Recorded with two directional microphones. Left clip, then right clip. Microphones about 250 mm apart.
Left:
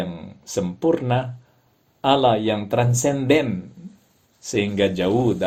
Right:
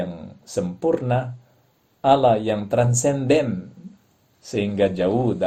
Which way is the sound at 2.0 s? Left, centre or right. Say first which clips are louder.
Right 2 dB; centre.